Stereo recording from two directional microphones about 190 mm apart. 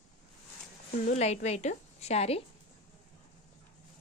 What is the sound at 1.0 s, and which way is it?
A woman's voice, 35° left (ahead or behind).